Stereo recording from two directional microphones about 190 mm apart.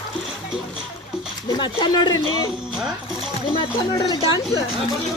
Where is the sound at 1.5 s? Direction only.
20° left (ahead or behind).